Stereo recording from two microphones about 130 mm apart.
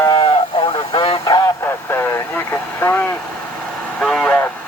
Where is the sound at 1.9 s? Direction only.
15° left (ahead or behind).